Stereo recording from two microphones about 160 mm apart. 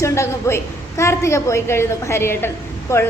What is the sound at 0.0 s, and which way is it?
A woman's voice, 20° left (ahead or behind).